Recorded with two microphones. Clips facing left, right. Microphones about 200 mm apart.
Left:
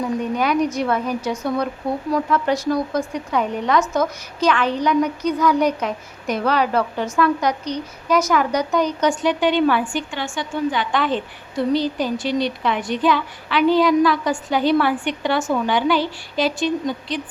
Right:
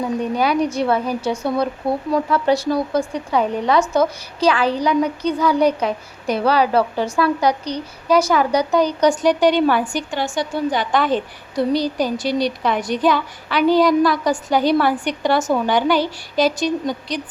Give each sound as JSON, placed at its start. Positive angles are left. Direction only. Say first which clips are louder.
{"t": 0.3, "sound": "speech", "louder": "right 1 dB", "side_deg": -35}